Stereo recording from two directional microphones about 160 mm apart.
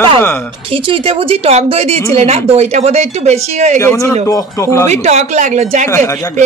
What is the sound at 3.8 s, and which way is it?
Speech, 15° left (ahead or behind).